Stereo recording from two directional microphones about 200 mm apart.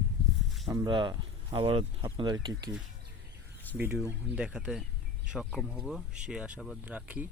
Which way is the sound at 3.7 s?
10° right (ahead or behind).